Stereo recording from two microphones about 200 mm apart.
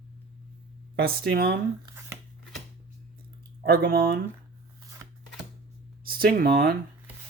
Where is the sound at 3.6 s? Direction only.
50° right (ahead or behind).